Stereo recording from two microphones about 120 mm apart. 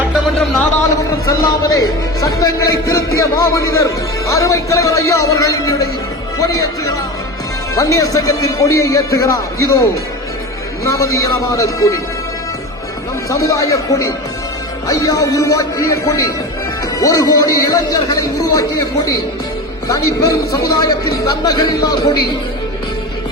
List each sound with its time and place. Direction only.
1.3 s a man's voice: 30° left (ahead or behind)
13.3 s a man's voice: 30° left (ahead or behind)